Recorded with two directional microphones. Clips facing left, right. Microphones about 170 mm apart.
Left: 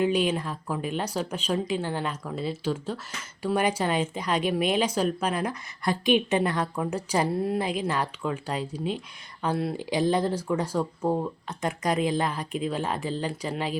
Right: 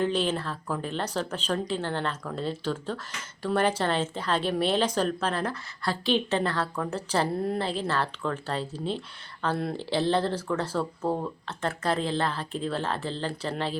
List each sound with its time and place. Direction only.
0.0 s speech: 10° left (ahead or behind)
7.6 s speech: 15° left (ahead or behind)